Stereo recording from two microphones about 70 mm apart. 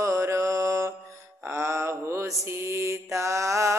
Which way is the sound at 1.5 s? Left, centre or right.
Right.